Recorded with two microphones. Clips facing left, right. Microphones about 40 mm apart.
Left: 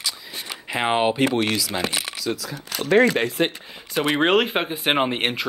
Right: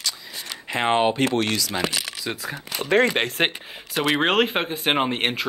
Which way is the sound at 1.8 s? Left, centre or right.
Right.